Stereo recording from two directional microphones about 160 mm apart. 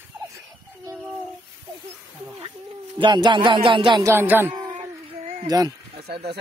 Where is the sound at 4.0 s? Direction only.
15° right (ahead or behind).